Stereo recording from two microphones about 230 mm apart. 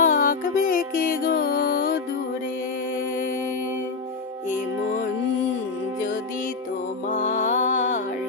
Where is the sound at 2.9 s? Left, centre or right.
Left.